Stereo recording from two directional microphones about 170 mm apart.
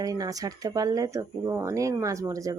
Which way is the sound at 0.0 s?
20° right (ahead or behind).